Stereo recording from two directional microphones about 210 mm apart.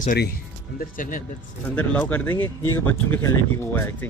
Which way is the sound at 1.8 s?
5° left (ahead or behind).